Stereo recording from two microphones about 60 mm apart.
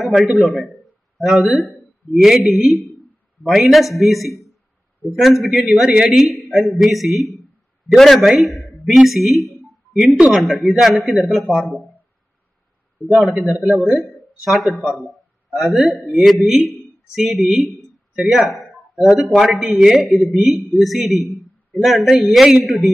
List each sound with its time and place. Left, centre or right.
0.0 s a sound: centre
1.2 s speech: centre
6.1 s speech: centre
9.9 s speech: centre
10.6 s speech: centre
13.1 s a man's voice: centre